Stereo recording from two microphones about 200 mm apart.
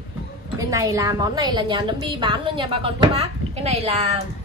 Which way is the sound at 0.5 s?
15° right (ahead or behind).